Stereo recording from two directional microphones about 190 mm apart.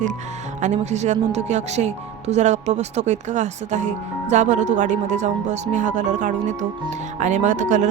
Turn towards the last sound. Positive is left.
turn(degrees=-40)  # may be behind; listen again after turning